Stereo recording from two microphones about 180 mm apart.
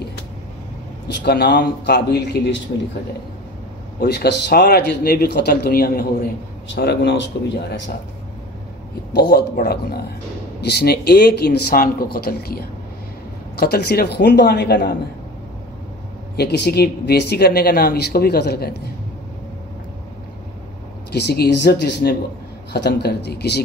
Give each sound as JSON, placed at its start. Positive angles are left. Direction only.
{"t": 1.0, "sound": "speech", "side_deg": 65}
{"t": 4.0, "sound": "speech", "side_deg": 60}
{"t": 6.7, "sound": "speech", "side_deg": 65}
{"t": 9.1, "sound": "speech", "side_deg": 65}
{"t": 16.3, "sound": "speech", "side_deg": 70}
{"t": 21.1, "sound": "speech", "side_deg": 65}